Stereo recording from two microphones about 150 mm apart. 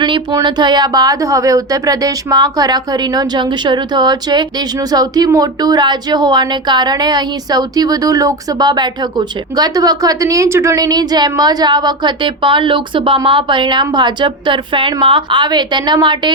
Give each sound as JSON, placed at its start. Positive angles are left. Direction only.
{"t": 0.0, "sound": "speech", "side_deg": -30}